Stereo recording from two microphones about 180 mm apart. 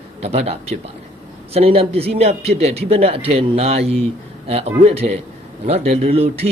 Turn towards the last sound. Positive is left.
turn(degrees=-35)  # may be behind; listen again after turning